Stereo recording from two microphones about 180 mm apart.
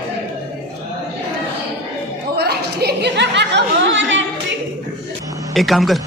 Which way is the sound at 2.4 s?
65° right (ahead or behind).